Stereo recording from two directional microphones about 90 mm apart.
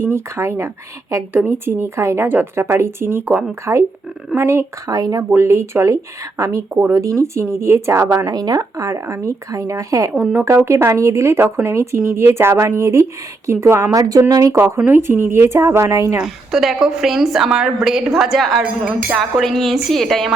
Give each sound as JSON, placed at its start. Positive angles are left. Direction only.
{"t": 0.0, "sound": "speech", "side_deg": -30}
{"t": 4.9, "sound": "speech", "side_deg": -45}
{"t": 5.3, "sound": "speech", "side_deg": -30}
{"t": 8.3, "sound": "speech", "side_deg": -45}
{"t": 14.8, "sound": "speech", "side_deg": -25}
{"t": 16.2, "sound": "a woman's voice", "side_deg": -5}